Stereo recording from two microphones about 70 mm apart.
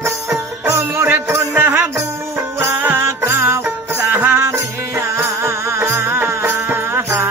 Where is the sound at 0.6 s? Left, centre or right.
Right.